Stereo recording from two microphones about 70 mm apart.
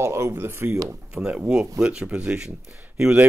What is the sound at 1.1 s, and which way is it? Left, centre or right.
Speech, centre.